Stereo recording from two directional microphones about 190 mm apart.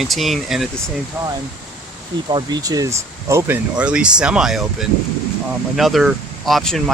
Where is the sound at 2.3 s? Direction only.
20° right (ahead or behind).